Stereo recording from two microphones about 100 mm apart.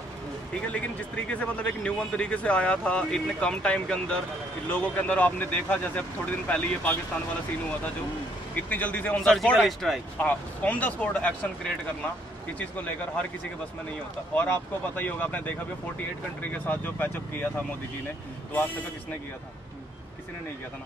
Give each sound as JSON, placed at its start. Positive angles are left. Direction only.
{"t": 0.6, "sound": "a man's voice", "side_deg": 15}
{"t": 8.6, "sound": "a man's voice", "side_deg": 15}
{"t": 9.3, "sound": "speech", "side_deg": 0}
{"t": 10.2, "sound": "a man's voice", "side_deg": 15}
{"t": 12.5, "sound": "a man's voice", "side_deg": 15}
{"t": 14.3, "sound": "a man's voice", "side_deg": 15}
{"t": 16.6, "sound": "a man's voice", "side_deg": 15}